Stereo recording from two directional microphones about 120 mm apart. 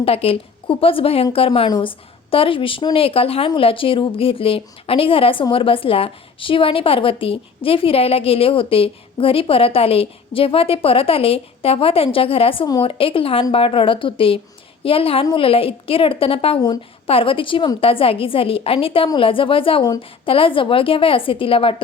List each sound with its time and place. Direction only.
0.0 s a woman's voice: 50° left (ahead or behind)